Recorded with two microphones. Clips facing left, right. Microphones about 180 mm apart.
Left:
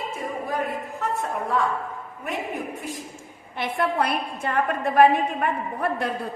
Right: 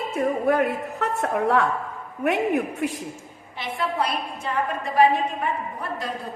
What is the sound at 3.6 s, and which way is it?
A woman's voice, 55° left (ahead or behind).